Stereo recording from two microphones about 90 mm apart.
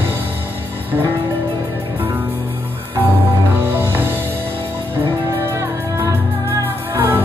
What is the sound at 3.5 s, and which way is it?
Music, 20° right (ahead or behind).